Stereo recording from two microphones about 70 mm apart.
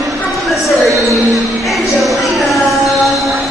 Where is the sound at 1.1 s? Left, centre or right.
Centre.